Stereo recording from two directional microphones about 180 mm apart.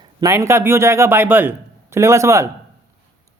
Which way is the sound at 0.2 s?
15° right (ahead or behind).